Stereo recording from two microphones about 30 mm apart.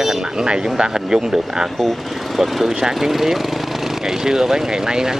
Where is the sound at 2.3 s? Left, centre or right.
Centre.